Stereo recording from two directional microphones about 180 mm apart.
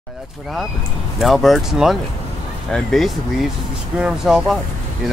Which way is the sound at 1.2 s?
Centre (ahead or behind).